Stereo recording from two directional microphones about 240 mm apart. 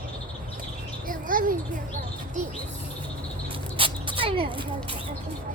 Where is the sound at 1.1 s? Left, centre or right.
Right.